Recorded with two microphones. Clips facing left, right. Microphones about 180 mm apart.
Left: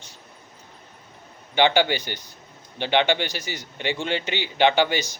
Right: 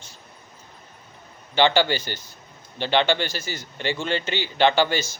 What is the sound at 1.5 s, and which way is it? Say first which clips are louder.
A man's voice: even; 15° left (ahead or behind).